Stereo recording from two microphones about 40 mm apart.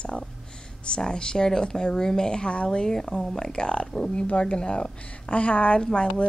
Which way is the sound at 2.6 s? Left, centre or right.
Centre.